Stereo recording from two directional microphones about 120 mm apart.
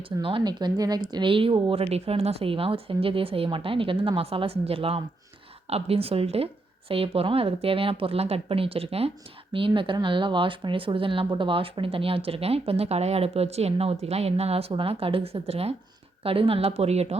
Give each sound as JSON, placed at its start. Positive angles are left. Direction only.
{"t": 0.2, "sound": "speech", "side_deg": -45}